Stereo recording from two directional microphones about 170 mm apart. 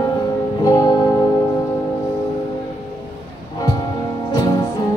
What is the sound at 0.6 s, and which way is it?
Music, 25° left (ahead or behind).